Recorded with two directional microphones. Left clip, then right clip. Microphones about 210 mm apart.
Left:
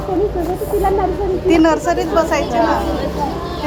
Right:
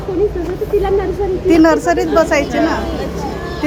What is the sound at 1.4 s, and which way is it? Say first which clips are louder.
A woman's voice: right 3 dB; 40° right (ahead or behind).